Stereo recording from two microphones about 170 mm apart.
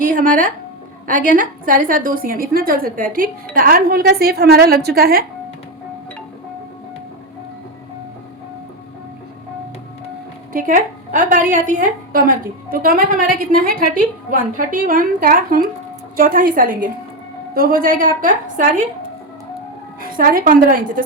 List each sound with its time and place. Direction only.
0.0 s music: 55° right (ahead or behind)
1.0 s a woman's voice: 50° right (ahead or behind)
10.5 s a woman's voice: 50° right (ahead or behind)
20.0 s a woman's voice: 55° right (ahead or behind)